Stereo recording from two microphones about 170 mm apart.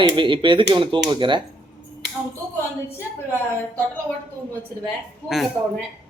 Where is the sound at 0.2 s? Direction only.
30° right (ahead or behind).